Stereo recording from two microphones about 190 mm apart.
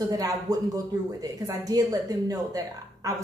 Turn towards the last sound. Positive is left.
turn(degrees=-20)  # may be behind; listen again after turning